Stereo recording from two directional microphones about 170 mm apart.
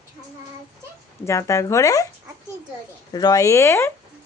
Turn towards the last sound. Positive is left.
turn(degrees=15)  # may be behind; listen again after turning